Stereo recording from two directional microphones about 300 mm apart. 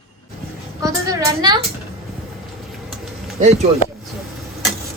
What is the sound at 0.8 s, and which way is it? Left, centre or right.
Speech, centre.